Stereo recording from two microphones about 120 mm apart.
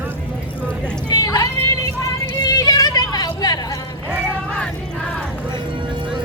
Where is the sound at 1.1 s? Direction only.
30° left (ahead or behind).